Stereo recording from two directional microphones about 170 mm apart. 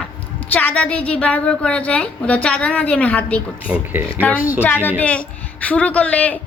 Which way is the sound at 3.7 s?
10° right (ahead or behind).